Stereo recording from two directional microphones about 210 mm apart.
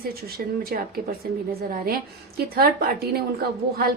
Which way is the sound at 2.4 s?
45° right (ahead or behind).